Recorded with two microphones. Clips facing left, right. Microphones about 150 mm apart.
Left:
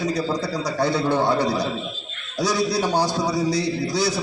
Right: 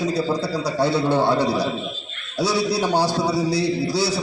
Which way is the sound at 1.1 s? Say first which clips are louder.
Right 1 dB; 15° left (ahead or behind).